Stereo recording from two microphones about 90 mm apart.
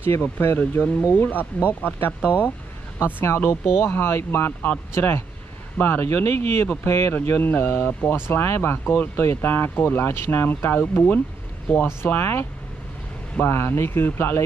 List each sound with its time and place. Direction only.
0.0 s speech: 25° left (ahead or behind)
3.2 s speech: 25° left (ahead or behind)